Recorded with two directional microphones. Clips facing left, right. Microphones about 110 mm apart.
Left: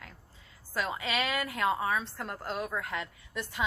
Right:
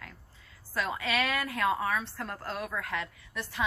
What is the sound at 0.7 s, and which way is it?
A woman's voice, 20° left (ahead or behind).